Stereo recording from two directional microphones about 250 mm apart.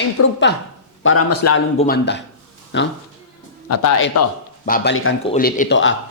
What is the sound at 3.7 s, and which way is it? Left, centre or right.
Speech, left.